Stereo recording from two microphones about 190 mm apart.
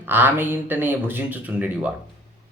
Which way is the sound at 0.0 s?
10° right (ahead or behind).